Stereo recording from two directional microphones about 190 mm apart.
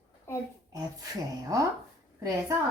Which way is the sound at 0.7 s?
20° right (ahead or behind).